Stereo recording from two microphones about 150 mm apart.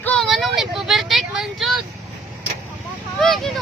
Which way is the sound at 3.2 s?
Centre (ahead or behind).